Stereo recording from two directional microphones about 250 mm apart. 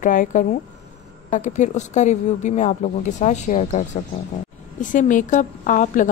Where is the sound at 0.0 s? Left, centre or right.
Left.